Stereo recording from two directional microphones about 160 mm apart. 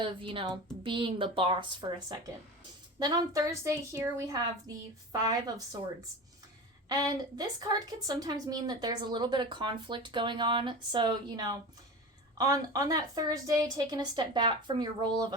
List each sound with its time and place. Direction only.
0.0 s a woman's voice: 35° right (ahead or behind)
6.8 s a woman's voice: 25° right (ahead or behind)